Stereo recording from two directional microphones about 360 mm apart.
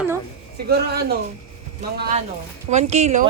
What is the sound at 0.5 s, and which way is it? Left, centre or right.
Speech, right.